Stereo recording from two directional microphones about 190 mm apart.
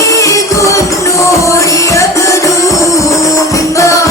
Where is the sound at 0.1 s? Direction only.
15° left (ahead or behind).